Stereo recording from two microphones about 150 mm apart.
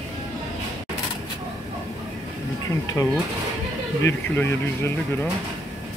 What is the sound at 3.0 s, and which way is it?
Speech, 15° left (ahead or behind).